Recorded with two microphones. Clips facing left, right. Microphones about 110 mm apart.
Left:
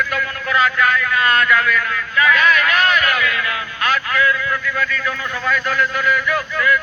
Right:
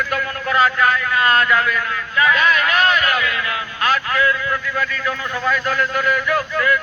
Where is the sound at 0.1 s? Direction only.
35° right (ahead or behind).